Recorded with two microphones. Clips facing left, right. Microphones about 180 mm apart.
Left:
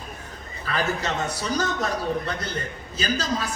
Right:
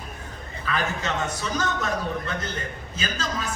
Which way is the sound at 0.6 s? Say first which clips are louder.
Left 1 dB; 40° left (ahead or behind).